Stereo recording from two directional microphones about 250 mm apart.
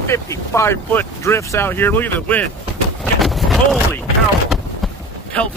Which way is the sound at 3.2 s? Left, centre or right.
Centre.